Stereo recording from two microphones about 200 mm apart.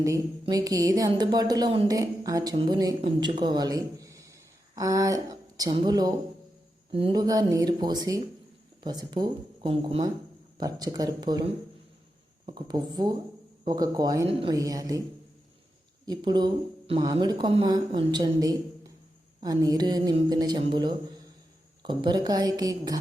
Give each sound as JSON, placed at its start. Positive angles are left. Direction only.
{"t": 0.0, "sound": "a woman's voice", "side_deg": -15}
{"t": 16.0, "sound": "a woman's voice", "side_deg": -20}